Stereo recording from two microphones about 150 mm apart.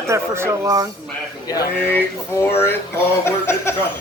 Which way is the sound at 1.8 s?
15° left (ahead or behind).